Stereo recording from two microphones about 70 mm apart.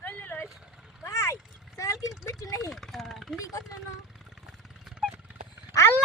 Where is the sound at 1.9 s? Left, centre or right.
Centre.